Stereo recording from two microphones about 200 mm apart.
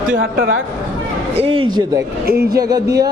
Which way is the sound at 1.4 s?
25° right (ahead or behind).